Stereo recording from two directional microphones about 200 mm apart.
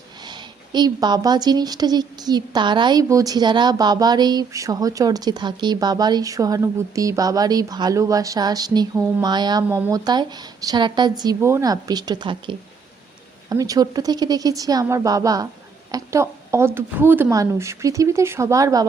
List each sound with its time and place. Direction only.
0.3 s a woman's voice: 20° right (ahead or behind)